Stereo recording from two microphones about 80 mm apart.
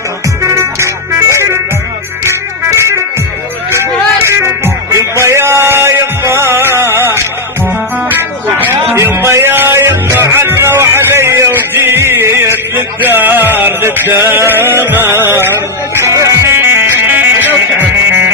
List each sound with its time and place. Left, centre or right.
0.5 s music: right
9.0 s music: right
16.5 s music: right